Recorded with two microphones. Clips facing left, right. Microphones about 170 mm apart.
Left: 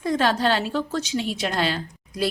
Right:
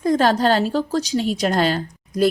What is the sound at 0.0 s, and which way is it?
A woman's voice, 40° right (ahead or behind).